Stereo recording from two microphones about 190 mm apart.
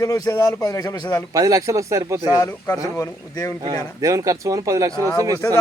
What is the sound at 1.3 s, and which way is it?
Speech, 20° right (ahead or behind).